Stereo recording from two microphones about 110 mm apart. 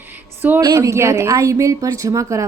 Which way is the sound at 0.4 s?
15° right (ahead or behind).